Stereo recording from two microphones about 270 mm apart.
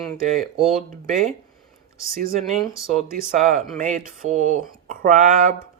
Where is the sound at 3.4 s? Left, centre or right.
Right.